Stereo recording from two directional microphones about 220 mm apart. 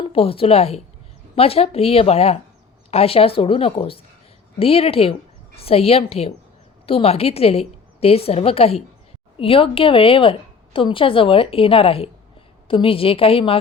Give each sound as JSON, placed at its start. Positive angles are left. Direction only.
{"t": 0.0, "sound": "a woman's voice", "side_deg": 25}